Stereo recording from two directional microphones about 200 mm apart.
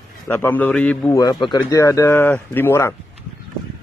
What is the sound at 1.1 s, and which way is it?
A man's voice, 20° left (ahead or behind).